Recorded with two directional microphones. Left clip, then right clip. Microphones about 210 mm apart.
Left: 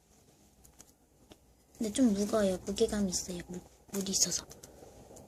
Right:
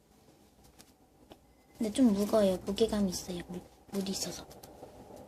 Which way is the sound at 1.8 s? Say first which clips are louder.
Right 1 dB; 10° left (ahead or behind).